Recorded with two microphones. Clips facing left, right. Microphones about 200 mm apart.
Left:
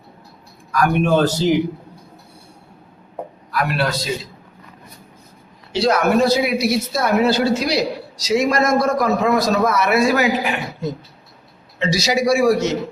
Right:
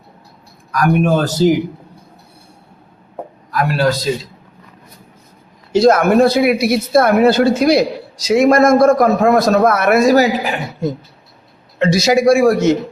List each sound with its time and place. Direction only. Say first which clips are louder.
0.8 s speech: right 2 dB; 45° right (ahead or behind)
3.5 s a man's voice: right 5 dB; 40° right (ahead or behind)
5.7 s speech: right 6 dB; 45° right (ahead or behind)
11.8 s speech: right 6 dB; 50° right (ahead or behind)